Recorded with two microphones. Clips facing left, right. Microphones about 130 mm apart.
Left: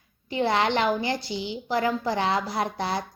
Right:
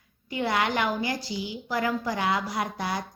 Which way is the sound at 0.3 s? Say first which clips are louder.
Left 3 dB; 30° left (ahead or behind).